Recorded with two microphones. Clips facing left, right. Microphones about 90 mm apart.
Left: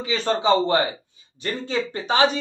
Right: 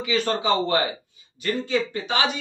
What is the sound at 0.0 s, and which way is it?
A man's voice, 30° left (ahead or behind).